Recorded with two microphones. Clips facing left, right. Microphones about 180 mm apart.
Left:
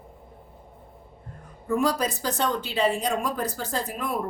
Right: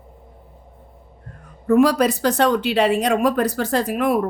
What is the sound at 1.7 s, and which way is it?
A woman's voice, 70° right (ahead or behind).